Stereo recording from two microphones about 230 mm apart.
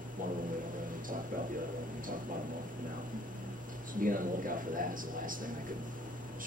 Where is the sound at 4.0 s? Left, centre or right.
Right.